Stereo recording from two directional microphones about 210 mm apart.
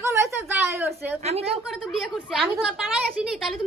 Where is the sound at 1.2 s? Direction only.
30° right (ahead or behind).